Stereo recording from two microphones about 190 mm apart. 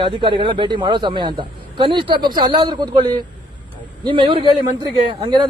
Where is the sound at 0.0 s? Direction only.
25° right (ahead or behind).